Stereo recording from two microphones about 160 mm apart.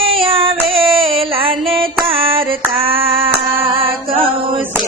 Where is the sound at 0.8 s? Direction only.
35° right (ahead or behind).